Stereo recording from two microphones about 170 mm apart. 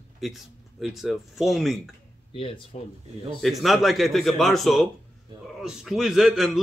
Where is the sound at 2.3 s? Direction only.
30° left (ahead or behind).